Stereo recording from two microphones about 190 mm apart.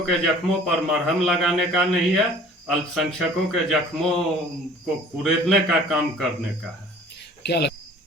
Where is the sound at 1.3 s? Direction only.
Centre (ahead or behind).